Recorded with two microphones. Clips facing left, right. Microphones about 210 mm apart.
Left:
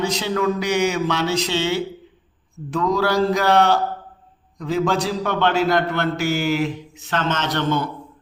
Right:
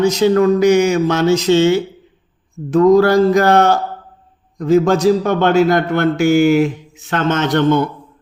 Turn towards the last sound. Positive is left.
turn(degrees=-50)  # may be behind; listen again after turning